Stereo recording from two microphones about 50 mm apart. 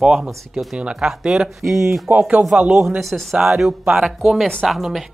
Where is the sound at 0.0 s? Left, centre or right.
Centre.